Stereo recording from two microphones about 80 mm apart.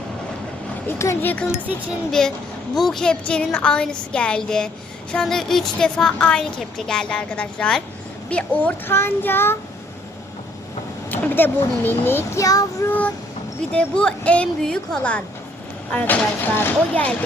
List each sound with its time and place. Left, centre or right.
0.9 s speech: left
1.2 s speech: left
2.0 s a woman's voice: centre
8.9 s speech: left
11.1 s speech: left
12.4 s child singing: left
12.9 s a woman's voice: centre
15.9 s speech: left
16.9 s a woman's voice: centre